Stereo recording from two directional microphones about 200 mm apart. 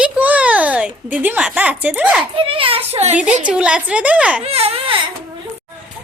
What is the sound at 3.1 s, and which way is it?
A woman's voice, 5° right (ahead or behind).